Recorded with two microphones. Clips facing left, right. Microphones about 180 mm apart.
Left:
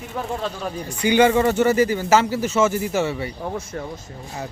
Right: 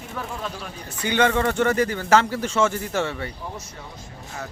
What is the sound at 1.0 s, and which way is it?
Speech, 10° left (ahead or behind).